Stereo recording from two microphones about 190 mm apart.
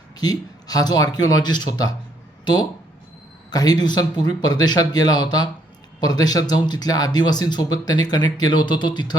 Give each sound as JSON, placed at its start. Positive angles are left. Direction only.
{"t": 0.2, "sound": "speech", "side_deg": 20}